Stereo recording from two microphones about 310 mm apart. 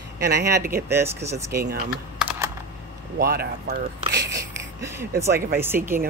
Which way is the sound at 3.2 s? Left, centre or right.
Right.